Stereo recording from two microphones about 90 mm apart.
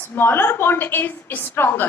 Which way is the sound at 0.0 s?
25° left (ahead or behind).